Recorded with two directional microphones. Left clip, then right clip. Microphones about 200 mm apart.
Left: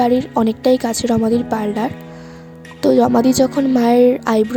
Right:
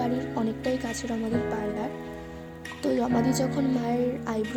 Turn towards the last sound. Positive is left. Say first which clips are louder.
# left 16 dB
turn(degrees=45)  # may be behind; listen again after turning